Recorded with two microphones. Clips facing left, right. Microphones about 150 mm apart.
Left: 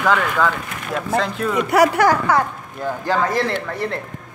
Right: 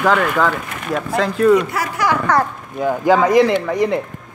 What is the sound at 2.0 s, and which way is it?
Speech, 50° left (ahead or behind).